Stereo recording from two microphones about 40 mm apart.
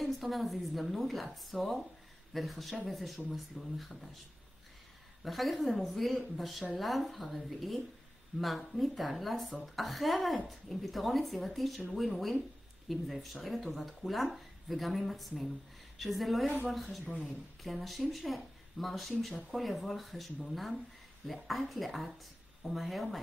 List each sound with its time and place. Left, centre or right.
0.0 s speech: centre
5.2 s speech: centre